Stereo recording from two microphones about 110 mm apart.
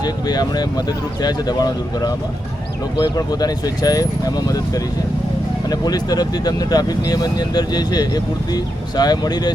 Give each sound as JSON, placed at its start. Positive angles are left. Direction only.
{"t": 0.0, "sound": "speech", "side_deg": 40}
{"t": 5.8, "sound": "speech", "side_deg": 40}